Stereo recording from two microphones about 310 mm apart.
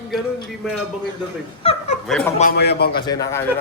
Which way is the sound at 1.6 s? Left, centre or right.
Centre.